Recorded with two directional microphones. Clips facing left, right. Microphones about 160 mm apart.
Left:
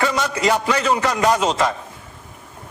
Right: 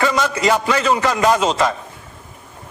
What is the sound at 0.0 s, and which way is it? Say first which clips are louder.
A man's voice: right 2 dB; 90° right.